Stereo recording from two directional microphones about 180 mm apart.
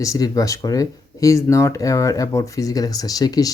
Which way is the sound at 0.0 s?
20° left (ahead or behind).